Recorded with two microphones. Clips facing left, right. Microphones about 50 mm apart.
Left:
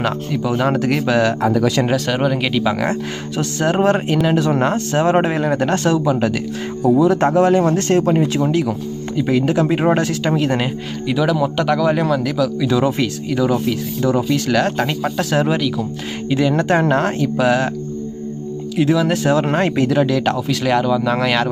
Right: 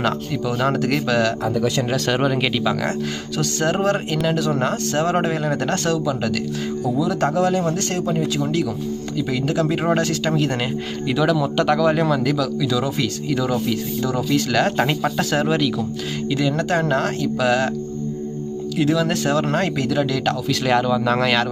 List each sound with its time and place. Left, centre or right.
0.0 s speech: centre
1.9 s speech: centre
2.6 s speech: centre
6.8 s speech: left
8.4 s speech: left; by 12.5 s centre
12.5 s speech: left
13.1 s speech: centre
14.3 s speech: centre
16.3 s speech: left
18.8 s speech: centre